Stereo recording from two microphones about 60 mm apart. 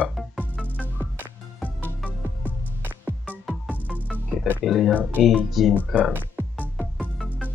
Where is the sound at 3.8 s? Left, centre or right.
Centre.